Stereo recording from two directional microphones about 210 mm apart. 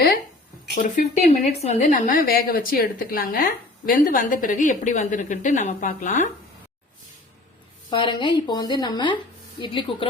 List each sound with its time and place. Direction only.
0.7 s a woman's voice: 40° left (ahead or behind)
7.9 s speech: 20° left (ahead or behind)